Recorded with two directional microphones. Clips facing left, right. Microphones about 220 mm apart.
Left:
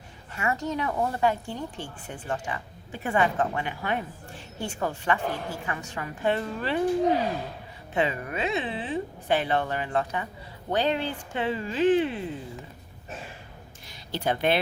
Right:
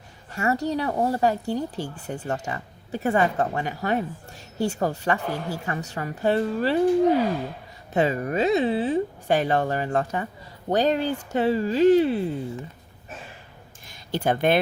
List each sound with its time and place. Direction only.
0.3 s speech: 40° right (ahead or behind)
7.9 s speech: 40° right (ahead or behind)
13.8 s speech: 50° right (ahead or behind)